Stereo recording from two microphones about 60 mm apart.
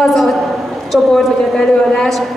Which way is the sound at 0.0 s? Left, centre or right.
Centre.